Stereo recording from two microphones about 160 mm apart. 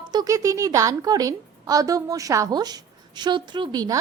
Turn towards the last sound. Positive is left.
turn(degrees=-25)  # may be behind; listen again after turning